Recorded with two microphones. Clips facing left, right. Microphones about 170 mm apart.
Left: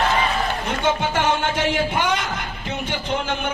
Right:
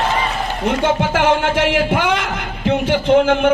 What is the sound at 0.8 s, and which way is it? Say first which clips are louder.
Speech: right 4 dB; 90° right.